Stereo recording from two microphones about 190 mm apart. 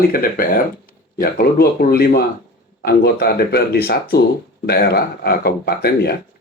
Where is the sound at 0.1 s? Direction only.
50° left (ahead or behind).